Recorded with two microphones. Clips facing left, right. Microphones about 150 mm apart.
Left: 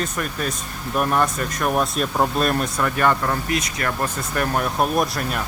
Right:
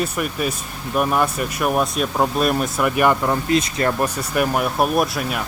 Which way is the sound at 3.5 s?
30° right (ahead or behind).